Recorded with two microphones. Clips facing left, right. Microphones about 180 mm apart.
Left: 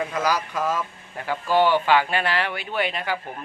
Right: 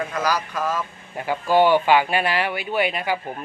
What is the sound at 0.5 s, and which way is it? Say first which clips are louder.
Speech: even; centre (ahead or behind).